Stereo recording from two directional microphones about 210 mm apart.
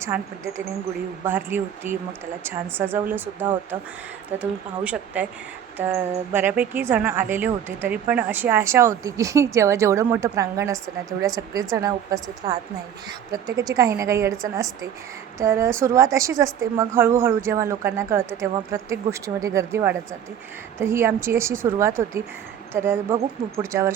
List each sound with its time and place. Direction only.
0.0 s a woman's voice: 10° right (ahead or behind)